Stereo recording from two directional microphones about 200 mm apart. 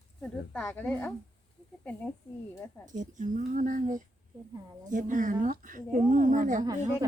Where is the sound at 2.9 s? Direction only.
40° right (ahead or behind).